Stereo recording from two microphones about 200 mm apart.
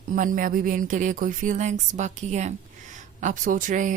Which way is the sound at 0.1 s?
40° right (ahead or behind).